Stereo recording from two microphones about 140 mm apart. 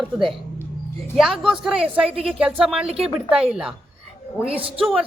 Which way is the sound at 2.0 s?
45° right (ahead or behind).